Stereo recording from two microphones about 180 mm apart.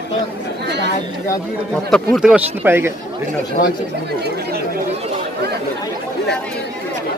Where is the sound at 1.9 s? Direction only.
5° right (ahead or behind).